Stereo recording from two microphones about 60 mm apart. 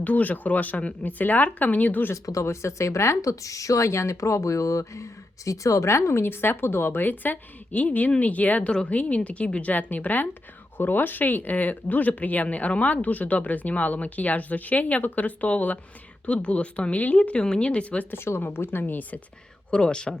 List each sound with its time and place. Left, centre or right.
0.0 s speech: left
2.1 s speech: left; by 18.0 s centre
18.1 s speech: left
19.7 s speech: centre